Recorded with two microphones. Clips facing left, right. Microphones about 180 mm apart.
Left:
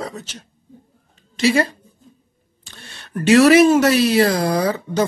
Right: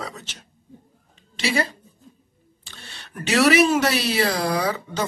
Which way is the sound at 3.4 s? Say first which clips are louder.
Left 5 dB; 45° left (ahead or behind).